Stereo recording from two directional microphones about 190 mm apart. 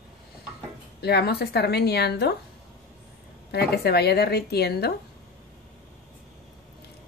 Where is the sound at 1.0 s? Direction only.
60° left (ahead or behind).